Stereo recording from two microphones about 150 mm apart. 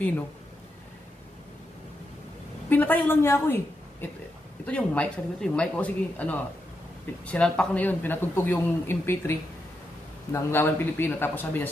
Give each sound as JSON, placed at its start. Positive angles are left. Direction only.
{"t": 2.7, "sound": "speech", "side_deg": 10}